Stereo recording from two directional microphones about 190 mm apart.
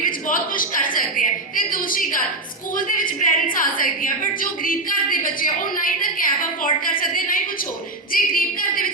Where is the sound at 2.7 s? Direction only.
45° left (ahead or behind).